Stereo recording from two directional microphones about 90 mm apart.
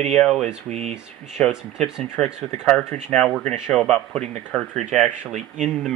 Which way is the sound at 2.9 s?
20° left (ahead or behind).